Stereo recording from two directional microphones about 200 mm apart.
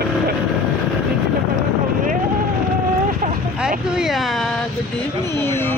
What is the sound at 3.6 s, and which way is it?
Speech, 5° right (ahead or behind).